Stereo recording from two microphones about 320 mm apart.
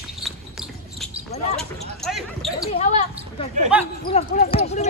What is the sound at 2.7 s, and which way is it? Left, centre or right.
Basketball bounce, centre.